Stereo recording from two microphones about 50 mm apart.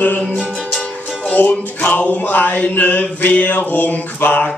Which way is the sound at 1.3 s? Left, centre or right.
Left.